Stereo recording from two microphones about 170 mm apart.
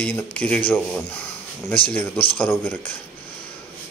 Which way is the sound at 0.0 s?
10° left (ahead or behind).